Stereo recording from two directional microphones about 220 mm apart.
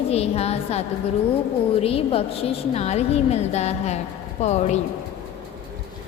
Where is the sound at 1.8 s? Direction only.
25° left (ahead or behind).